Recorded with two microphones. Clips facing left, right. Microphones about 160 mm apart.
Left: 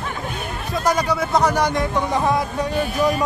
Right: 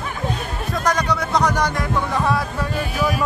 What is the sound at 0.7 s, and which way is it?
Speech, 5° left (ahead or behind).